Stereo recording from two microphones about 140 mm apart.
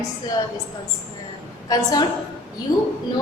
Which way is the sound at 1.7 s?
25° left (ahead or behind).